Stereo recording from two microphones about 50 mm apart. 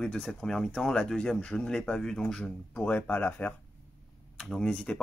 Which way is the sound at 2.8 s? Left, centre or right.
Left.